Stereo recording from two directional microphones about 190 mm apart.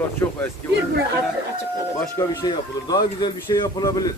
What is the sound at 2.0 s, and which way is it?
Speech, 15° left (ahead or behind).